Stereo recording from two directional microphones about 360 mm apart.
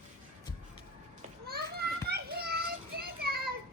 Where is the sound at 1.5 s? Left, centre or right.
Right.